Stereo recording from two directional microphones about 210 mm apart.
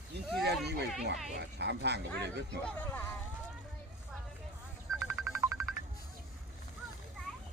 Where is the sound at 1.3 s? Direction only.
55° right (ahead or behind).